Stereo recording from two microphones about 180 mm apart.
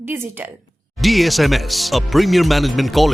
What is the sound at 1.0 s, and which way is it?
Speech, centre (ahead or behind).